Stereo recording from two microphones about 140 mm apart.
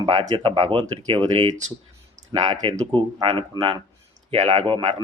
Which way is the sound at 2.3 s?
35° right (ahead or behind).